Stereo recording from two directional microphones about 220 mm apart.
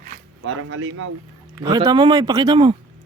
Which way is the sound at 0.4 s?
65° right (ahead or behind).